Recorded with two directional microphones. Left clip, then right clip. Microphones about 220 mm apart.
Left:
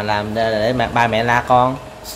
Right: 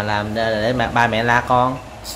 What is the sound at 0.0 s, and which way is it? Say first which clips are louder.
Speech: left 2 dB; 5° left (ahead or behind).